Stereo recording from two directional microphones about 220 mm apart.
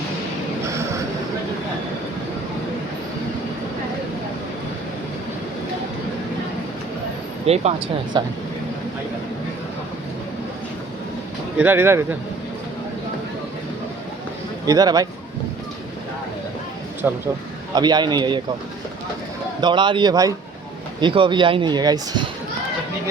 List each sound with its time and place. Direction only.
7.4 s speech: 30° right (ahead or behind)
11.5 s speech: 10° right (ahead or behind)
14.7 s speech: 15° right (ahead or behind)
17.0 s speech: 10° right (ahead or behind)
17.7 s speech: 20° right (ahead or behind)
19.6 s speech: 20° right (ahead or behind)